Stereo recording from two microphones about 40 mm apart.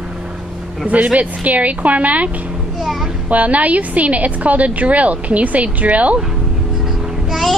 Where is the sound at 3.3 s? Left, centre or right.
Right.